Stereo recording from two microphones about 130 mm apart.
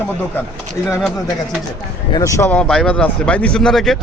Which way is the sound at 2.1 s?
25° left (ahead or behind).